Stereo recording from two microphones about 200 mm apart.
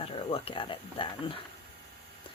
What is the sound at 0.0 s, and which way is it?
Speech, 30° left (ahead or behind).